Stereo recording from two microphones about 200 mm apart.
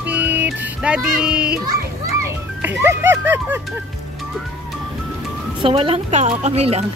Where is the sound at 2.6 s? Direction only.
10° right (ahead or behind).